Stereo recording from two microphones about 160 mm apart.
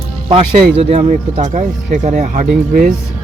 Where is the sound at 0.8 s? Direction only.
45° right (ahead or behind).